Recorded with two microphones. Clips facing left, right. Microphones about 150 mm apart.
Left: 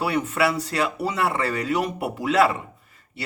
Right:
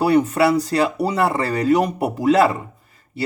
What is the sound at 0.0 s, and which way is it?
Speech, 40° right (ahead or behind).